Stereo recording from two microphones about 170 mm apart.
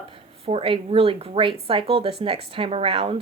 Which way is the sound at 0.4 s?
35° right (ahead or behind).